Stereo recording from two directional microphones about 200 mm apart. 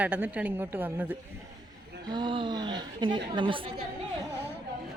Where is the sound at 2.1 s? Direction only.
25° right (ahead or behind).